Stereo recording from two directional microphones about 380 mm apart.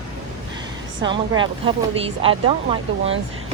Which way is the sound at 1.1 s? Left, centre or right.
Centre.